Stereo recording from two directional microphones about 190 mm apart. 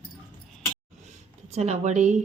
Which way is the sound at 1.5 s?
35° right (ahead or behind).